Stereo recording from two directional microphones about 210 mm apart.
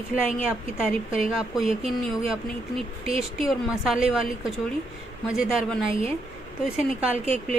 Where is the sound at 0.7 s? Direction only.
5° right (ahead or behind).